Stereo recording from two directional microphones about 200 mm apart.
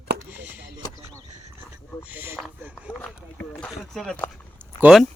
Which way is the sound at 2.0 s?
10° right (ahead or behind).